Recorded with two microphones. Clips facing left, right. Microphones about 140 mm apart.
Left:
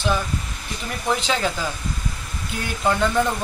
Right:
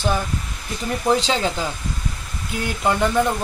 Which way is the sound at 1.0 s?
30° right (ahead or behind).